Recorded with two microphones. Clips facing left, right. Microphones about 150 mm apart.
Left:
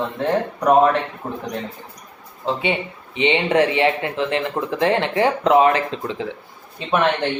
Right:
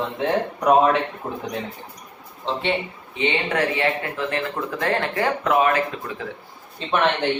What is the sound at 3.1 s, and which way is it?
Speech, 20° left (ahead or behind).